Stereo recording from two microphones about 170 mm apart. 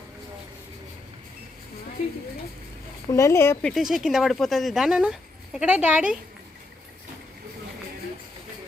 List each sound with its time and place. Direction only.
3.1 s speech: 15° left (ahead or behind)
3.7 s speech: centre (ahead or behind)